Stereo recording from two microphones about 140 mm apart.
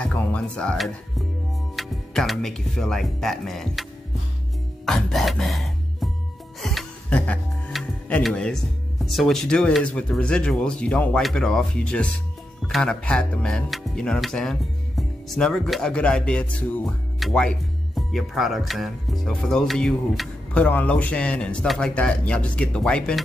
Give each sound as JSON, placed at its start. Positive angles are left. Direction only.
{"t": 0.0, "sound": "speech", "side_deg": 10}
{"t": 4.8, "sound": "music", "side_deg": 0}
{"t": 8.2, "sound": "speech", "side_deg": 0}